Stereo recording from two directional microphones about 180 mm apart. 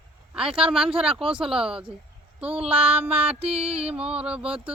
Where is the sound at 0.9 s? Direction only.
30° right (ahead or behind).